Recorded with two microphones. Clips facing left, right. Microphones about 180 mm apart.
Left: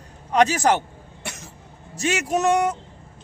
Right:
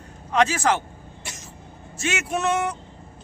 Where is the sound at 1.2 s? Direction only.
60° left (ahead or behind).